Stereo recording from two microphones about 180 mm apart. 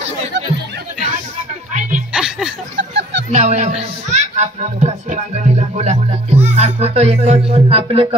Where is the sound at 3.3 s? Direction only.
40° right (ahead or behind).